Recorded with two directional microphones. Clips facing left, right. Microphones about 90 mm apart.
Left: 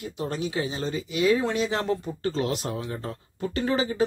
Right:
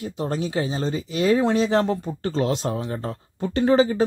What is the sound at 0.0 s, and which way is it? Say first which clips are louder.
Speech: right 4 dB; 35° right (ahead or behind).